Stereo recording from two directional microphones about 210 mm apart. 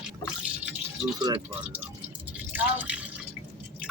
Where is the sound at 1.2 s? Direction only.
20° right (ahead or behind).